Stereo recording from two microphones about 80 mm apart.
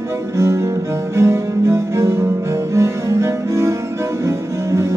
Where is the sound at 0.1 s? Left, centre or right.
Right.